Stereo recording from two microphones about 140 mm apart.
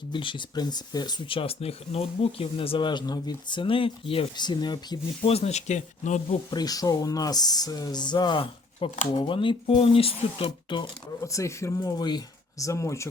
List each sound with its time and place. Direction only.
0.1 s speech: 35° left (ahead or behind)
5.3 s speech: 50° left (ahead or behind)
6.5 s speech: 30° left (ahead or behind)
11.2 s speech: 20° left (ahead or behind)